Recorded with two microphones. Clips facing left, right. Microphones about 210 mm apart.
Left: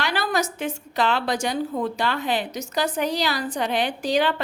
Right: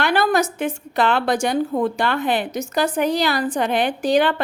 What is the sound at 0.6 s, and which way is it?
A woman's voice, 55° right (ahead or behind).